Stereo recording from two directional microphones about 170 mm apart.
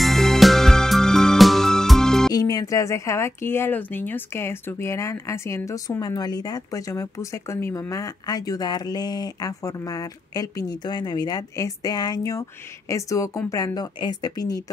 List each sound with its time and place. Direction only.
0.0 s music: centre (ahead or behind)
2.3 s speech: 20° left (ahead or behind)